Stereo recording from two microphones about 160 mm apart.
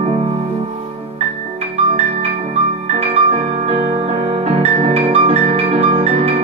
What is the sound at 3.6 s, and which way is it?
Music, 35° right (ahead or behind).